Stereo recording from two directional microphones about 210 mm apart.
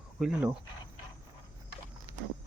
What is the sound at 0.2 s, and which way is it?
Speech, 5° right (ahead or behind).